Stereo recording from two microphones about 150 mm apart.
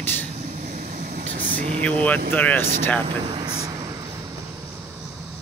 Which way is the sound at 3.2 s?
35° right (ahead or behind).